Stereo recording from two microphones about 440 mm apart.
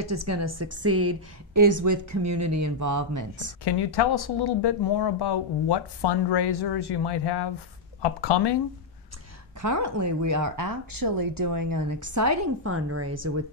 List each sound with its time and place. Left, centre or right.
0.0 s a woman's voice: right
3.6 s speech: left
9.6 s a woman's voice: right